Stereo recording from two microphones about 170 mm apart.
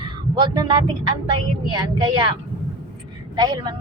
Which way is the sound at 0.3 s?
25° right (ahead or behind).